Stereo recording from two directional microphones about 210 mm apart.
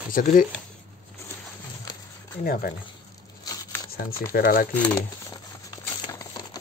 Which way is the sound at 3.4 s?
15° left (ahead or behind).